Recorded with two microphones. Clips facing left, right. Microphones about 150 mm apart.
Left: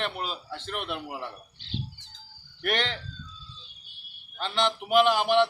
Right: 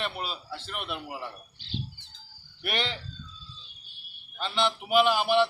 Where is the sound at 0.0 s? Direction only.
10° right (ahead or behind).